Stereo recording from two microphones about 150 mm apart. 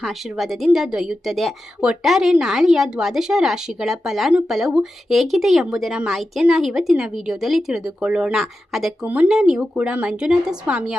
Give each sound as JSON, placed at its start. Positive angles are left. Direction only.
{"t": 0.0, "sound": "a woman's voice", "side_deg": 0}